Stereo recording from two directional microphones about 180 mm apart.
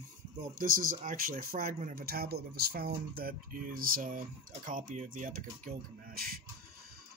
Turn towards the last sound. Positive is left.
turn(degrees=-55)  # may be behind; listen again after turning